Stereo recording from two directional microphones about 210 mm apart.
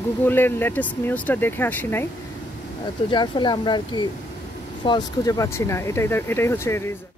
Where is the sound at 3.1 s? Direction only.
20° left (ahead or behind).